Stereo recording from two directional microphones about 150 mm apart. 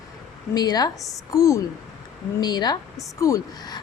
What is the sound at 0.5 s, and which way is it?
A woman's voice, 25° left (ahead or behind).